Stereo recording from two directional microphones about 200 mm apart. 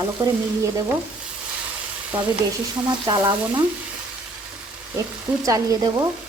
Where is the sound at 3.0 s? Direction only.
20° right (ahead or behind).